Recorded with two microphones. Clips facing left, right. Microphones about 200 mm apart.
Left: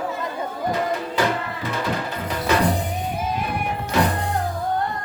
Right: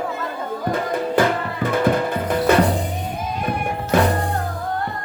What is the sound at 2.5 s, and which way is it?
Music, 55° right (ahead or behind).